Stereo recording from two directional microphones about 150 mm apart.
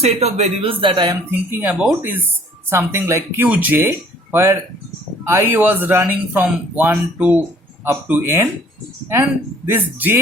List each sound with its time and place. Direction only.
0.0 s speech: 45° right (ahead or behind)
1.5 s speech: 10° right (ahead or behind)
9.6 s speech: 15° right (ahead or behind)